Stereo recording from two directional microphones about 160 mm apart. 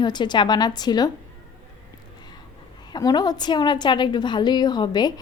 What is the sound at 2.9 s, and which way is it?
A woman's voice, 25° left (ahead or behind).